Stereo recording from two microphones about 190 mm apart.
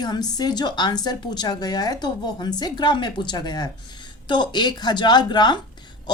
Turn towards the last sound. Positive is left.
turn(degrees=20)  # may be behind; listen again after turning